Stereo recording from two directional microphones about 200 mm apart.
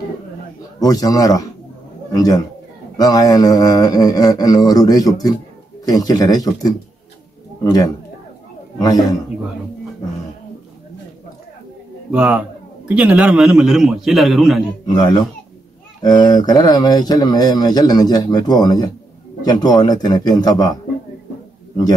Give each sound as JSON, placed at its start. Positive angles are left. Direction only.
{"t": 0.7, "sound": "a man's voice", "side_deg": 20}
{"t": 12.1, "sound": "a man's voice", "side_deg": -5}
{"t": 14.9, "sound": "speech", "side_deg": 20}